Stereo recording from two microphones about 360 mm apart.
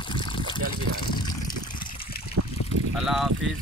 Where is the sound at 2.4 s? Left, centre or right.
Right.